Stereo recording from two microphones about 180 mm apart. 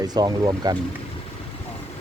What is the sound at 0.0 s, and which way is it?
Speech, 20° right (ahead or behind).